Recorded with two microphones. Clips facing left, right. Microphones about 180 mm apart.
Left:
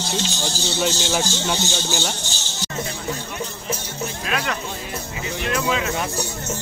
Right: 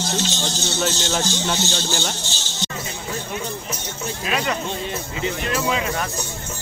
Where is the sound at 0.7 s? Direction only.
10° left (ahead or behind).